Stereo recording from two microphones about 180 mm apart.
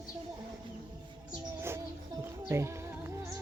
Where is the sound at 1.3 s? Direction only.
15° right (ahead or behind).